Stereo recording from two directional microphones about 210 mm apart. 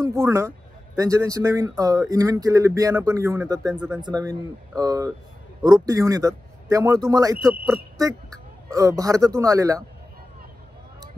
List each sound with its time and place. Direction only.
0.0 s speech: 15° right (ahead or behind)
3.7 s speech: 5° right (ahead or behind)
4.0 s speech: 20° right (ahead or behind)